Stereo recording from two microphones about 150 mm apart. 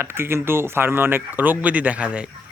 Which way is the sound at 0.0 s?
15° right (ahead or behind).